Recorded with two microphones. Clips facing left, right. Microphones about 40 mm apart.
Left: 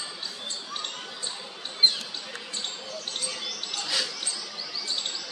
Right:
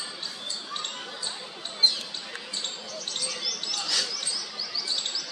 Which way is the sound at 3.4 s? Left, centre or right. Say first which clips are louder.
Right 1 dB; left.